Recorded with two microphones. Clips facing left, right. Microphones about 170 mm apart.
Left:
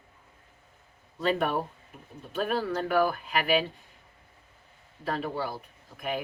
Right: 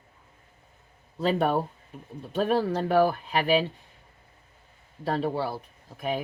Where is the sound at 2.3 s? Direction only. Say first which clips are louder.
Right 4 dB; 35° right (ahead or behind).